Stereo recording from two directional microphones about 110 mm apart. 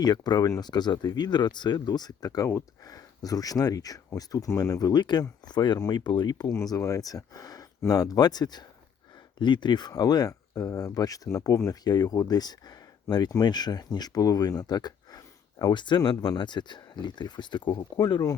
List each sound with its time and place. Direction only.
0.0 s speech: 40° left (ahead or behind)
6.6 s speech: 30° left (ahead or behind)